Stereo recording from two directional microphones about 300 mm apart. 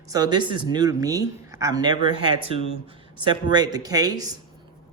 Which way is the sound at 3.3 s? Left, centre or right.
Centre.